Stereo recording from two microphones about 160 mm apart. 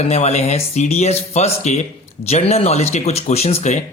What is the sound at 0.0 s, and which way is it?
Speech, 40° left (ahead or behind).